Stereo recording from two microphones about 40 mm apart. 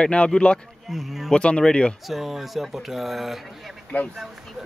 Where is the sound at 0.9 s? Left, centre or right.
Centre.